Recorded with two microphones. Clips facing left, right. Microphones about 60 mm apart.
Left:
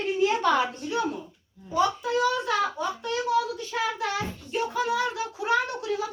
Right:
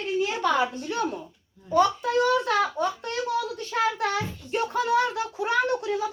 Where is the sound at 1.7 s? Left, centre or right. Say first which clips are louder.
Right 3 dB; right.